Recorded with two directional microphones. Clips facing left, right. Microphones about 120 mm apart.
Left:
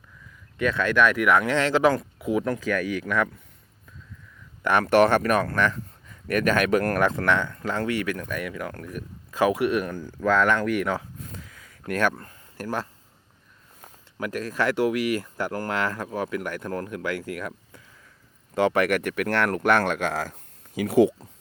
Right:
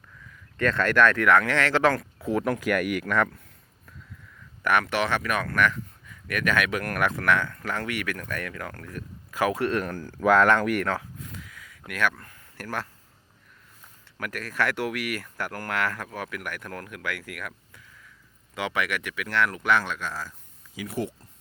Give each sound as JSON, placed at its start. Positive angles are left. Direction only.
{"t": 0.5, "sound": "speech", "side_deg": 5}
{"t": 2.4, "sound": "speech", "side_deg": -10}
{"t": 4.6, "sound": "speech", "side_deg": 30}
{"t": 4.9, "sound": "speech", "side_deg": 45}
{"t": 10.2, "sound": "speech", "side_deg": -5}
{"t": 11.3, "sound": "a sound", "side_deg": 35}
{"t": 11.9, "sound": "speech", "side_deg": 35}
{"t": 12.5, "sound": "speech", "side_deg": 20}
{"t": 14.2, "sound": "speech", "side_deg": 20}
{"t": 18.5, "sound": "speech", "side_deg": 40}